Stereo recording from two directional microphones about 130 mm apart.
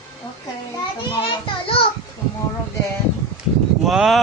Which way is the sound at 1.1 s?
40° left (ahead or behind).